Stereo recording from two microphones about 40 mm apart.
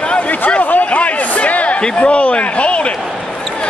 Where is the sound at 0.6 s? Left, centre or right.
Left.